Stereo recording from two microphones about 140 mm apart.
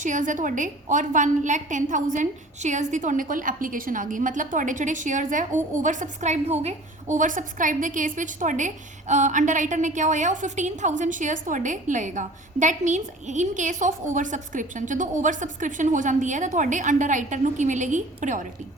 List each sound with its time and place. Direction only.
0.0 s a woman's voice: 65° right (ahead or behind)